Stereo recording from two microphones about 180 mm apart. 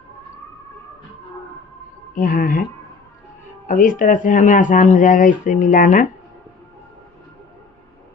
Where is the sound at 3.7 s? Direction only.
45° left (ahead or behind).